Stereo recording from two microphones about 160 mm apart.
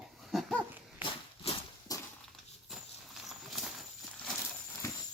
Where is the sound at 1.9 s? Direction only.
25° left (ahead or behind).